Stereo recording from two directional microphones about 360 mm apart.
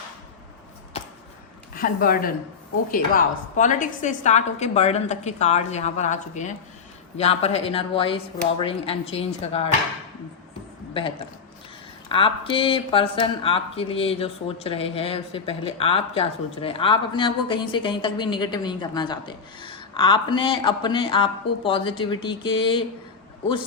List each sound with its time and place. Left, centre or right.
1.7 s a woman's voice: left
12.0 s speech: centre